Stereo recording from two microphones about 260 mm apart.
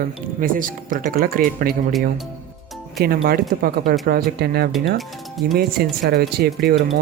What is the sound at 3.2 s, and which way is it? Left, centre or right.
Speech, right.